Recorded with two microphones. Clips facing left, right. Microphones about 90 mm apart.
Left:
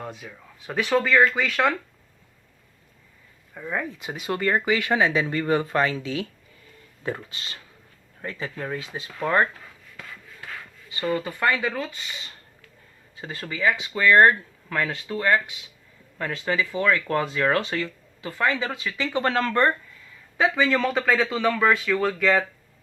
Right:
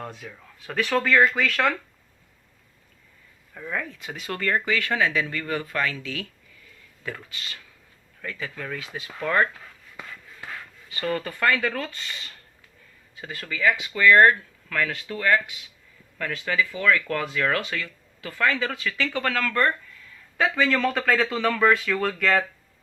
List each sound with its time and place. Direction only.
0.0 s speech: 5° left (ahead or behind)
3.5 s speech: 15° left (ahead or behind)
10.8 s speech: 20° left (ahead or behind)
13.1 s speech: 30° left (ahead or behind)
20.4 s speech: 10° left (ahead or behind)